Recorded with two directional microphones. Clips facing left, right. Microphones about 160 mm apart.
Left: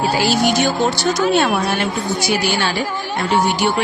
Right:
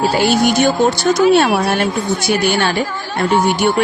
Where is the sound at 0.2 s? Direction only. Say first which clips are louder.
Right 3 dB; 55° right (ahead or behind).